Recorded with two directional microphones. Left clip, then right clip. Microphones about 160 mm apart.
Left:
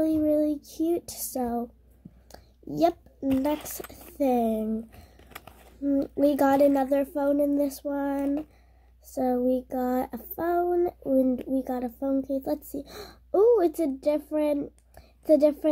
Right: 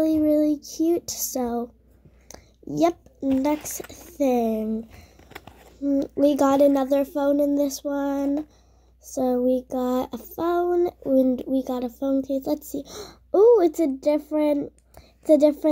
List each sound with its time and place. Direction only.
0.0 s child singing: 30° right (ahead or behind)
2.2 s a sound: 25° right (ahead or behind)
3.5 s speech: centre (ahead or behind)
4.2 s speech: 25° right (ahead or behind)
5.3 s a sound: centre (ahead or behind)
5.8 s a child's voice: 15° right (ahead or behind)